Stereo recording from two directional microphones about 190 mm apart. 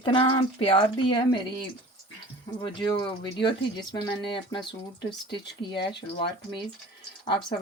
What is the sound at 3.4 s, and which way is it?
Speech, 25° left (ahead or behind).